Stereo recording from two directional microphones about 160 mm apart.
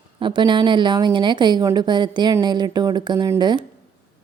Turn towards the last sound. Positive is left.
turn(degrees=-25)  # may be behind; listen again after turning